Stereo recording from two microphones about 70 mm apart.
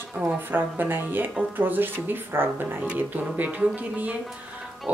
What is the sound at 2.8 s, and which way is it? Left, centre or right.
Speech, centre.